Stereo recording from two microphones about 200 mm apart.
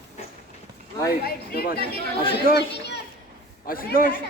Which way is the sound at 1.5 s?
50° left (ahead or behind).